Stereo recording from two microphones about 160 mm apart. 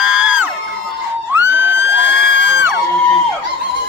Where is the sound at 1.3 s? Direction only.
15° right (ahead or behind).